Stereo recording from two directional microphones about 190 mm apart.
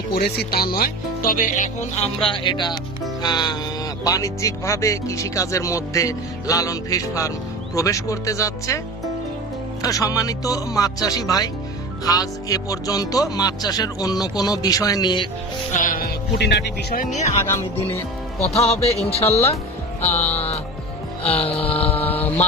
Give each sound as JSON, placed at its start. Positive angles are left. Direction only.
{"t": 0.1, "sound": "speech", "side_deg": 55}
{"t": 9.8, "sound": "speech", "side_deg": 20}
{"t": 15.7, "sound": "speech", "side_deg": 45}
{"t": 17.4, "sound": "speech", "side_deg": 15}
{"t": 18.5, "sound": "speech", "side_deg": 30}
{"t": 20.1, "sound": "speech", "side_deg": 10}
{"t": 21.2, "sound": "speech", "side_deg": 30}
{"t": 21.6, "sound": "a sound", "side_deg": 30}